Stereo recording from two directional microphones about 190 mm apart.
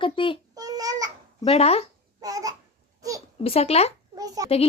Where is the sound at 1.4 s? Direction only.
30° left (ahead or behind).